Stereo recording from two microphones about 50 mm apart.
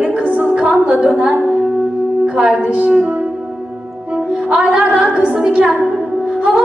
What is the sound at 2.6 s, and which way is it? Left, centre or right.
Speech, right.